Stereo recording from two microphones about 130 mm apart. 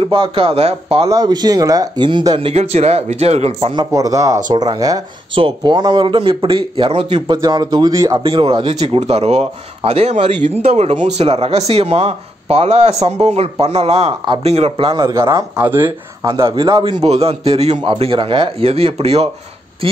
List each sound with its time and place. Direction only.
0.0 s speech: 45° right (ahead or behind)
1.0 s speech: 30° right (ahead or behind)
2.5 s speech: 55° right (ahead or behind)
3.7 s speech: 25° right (ahead or behind); by 7.2 s 55° right (ahead or behind)
7.2 s speech: 35° right (ahead or behind)
8.2 s speech: 40° right (ahead or behind); by 16.3 s 15° right (ahead or behind)
16.3 s speech: 40° right (ahead or behind)
16.9 s speech: 55° right (ahead or behind)